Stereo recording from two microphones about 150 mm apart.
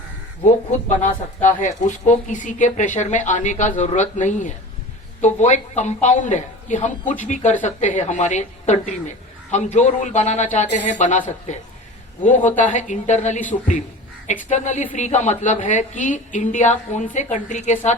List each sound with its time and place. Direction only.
0.4 s a woman's voice: 55° left (ahead or behind)